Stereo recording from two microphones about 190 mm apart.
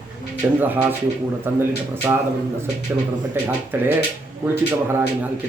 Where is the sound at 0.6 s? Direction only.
10° right (ahead or behind).